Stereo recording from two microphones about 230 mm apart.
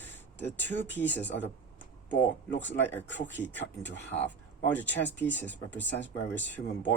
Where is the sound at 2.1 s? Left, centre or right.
Left.